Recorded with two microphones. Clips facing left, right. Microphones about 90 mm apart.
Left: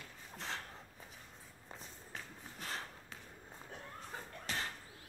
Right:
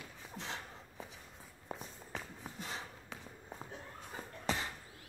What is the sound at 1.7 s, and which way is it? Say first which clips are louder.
Walk: right 6 dB; 10° right (ahead or behind).